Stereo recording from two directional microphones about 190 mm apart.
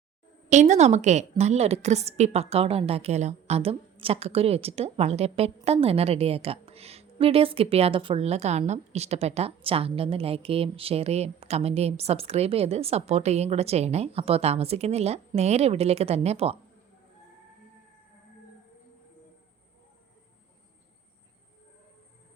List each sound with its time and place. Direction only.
0.5 s a woman's voice: 35° right (ahead or behind)